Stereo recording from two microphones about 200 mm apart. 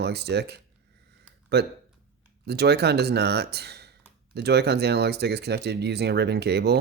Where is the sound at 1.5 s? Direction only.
55° right (ahead or behind).